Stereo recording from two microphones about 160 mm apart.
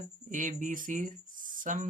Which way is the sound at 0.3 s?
55° right (ahead or behind).